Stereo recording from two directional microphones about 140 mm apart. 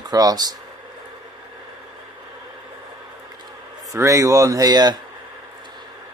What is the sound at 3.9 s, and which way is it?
Speech, 20° right (ahead or behind).